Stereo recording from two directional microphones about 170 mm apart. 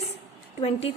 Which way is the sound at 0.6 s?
35° left (ahead or behind).